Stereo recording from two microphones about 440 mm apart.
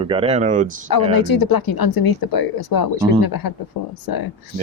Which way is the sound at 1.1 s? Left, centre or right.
Left.